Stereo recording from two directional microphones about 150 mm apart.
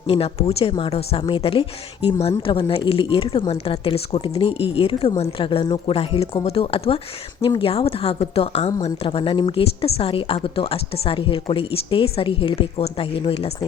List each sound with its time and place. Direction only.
0.1 s speech: 40° left (ahead or behind)